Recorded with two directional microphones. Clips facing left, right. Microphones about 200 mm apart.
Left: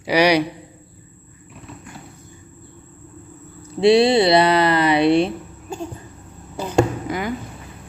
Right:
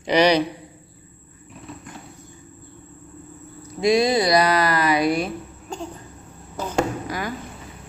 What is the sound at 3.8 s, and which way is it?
Speech, 30° left (ahead or behind).